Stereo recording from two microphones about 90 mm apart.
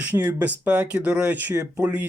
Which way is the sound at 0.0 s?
20° right (ahead or behind).